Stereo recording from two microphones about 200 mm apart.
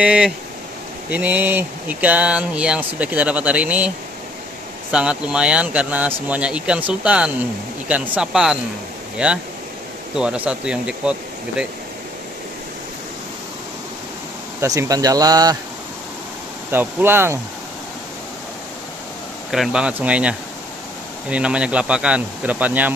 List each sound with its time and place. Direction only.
0.0 s speech: 5° right (ahead or behind)
4.9 s speech: 5° right (ahead or behind)
14.6 s speech: 15° right (ahead or behind)
16.7 s speech: 10° right (ahead or behind)
19.5 s speech: 5° right (ahead or behind)